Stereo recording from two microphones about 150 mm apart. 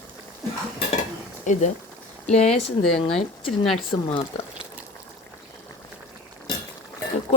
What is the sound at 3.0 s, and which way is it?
Speech, 40° left (ahead or behind).